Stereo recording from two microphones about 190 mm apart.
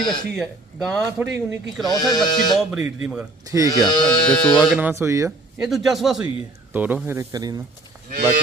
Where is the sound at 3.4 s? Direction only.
20° right (ahead or behind).